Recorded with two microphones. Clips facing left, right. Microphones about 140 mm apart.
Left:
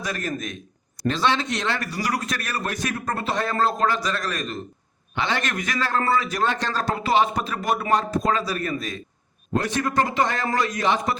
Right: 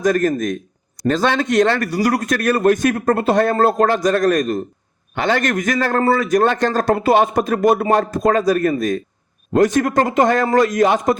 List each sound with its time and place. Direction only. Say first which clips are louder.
0.0 s a man's voice: right 12 dB; 45° right (ahead or behind)